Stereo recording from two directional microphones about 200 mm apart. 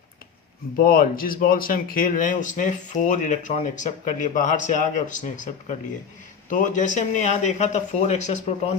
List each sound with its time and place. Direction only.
0.8 s speech: 45° left (ahead or behind)